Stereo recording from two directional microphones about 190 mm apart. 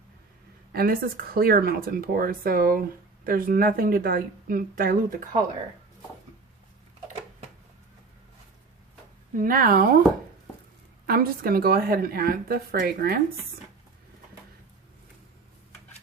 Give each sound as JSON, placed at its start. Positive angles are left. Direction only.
{"t": 0.7, "sound": "a woman's voice", "side_deg": -50}
{"t": 9.4, "sound": "a woman's voice", "side_deg": -50}
{"t": 11.0, "sound": "a woman's voice", "side_deg": -50}